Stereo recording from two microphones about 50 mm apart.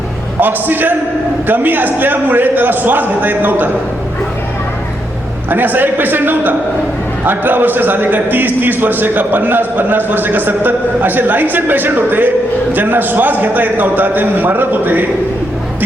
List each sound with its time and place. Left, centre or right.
0.3 s a man's voice: right
5.5 s a man's voice: right